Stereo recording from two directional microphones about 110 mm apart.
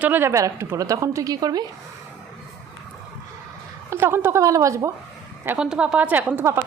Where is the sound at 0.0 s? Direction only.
20° right (ahead or behind).